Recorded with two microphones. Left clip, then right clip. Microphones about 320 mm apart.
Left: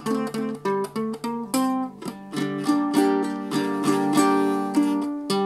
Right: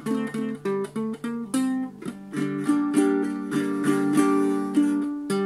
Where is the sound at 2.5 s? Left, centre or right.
Centre.